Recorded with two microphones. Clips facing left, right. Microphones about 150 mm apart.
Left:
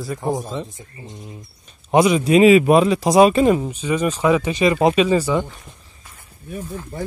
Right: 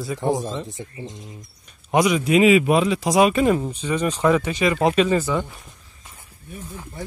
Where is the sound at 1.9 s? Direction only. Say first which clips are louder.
Left 3 dB; 30° left (ahead or behind).